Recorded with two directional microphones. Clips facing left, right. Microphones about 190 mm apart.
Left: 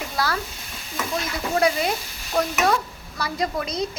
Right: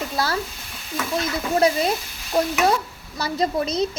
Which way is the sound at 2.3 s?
20° right (ahead or behind).